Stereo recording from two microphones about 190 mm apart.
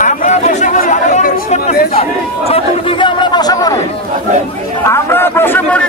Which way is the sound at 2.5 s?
25° left (ahead or behind).